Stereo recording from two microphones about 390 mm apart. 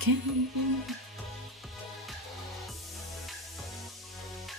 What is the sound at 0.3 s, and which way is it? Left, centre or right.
Music, centre.